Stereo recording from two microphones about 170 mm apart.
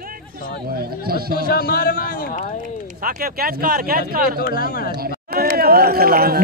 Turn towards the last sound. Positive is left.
turn(degrees=-60)  # may be behind; listen again after turning